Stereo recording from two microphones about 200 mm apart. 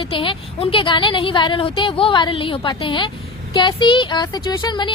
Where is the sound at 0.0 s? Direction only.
25° left (ahead or behind).